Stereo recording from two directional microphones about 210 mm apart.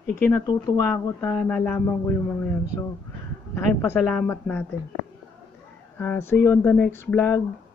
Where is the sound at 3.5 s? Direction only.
10° left (ahead or behind).